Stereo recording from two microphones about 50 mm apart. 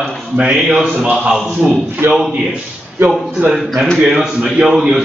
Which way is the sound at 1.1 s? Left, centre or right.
Centre.